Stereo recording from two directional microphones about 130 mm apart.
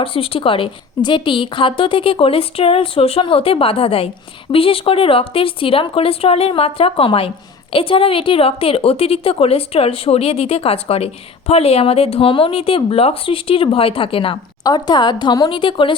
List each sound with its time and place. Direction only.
0.0 s a woman's voice: 45° left (ahead or behind)
14.6 s speech: 30° left (ahead or behind)